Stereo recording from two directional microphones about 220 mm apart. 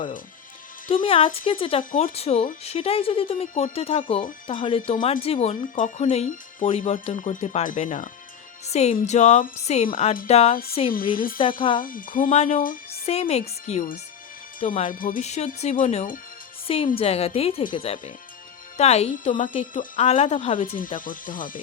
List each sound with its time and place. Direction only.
1.0 s speech: 25° left (ahead or behind)
1.8 s speech: 40° left (ahead or behind)
11.1 s speech: 40° left (ahead or behind); by 20.7 s 25° left (ahead or behind)
20.7 s speech: 40° left (ahead or behind)